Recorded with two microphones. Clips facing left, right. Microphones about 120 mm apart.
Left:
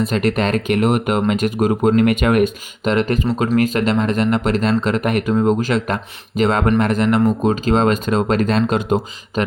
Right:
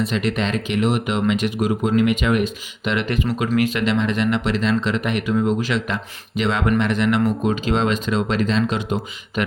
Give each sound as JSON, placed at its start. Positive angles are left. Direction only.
{"t": 0.0, "sound": "speech", "side_deg": 50}
{"t": 2.9, "sound": "speech", "side_deg": 40}